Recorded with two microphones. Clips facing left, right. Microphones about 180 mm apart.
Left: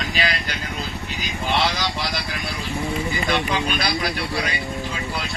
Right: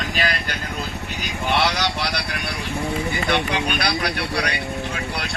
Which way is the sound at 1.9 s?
65° right (ahead or behind).